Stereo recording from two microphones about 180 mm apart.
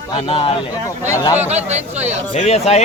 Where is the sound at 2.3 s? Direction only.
35° left (ahead or behind).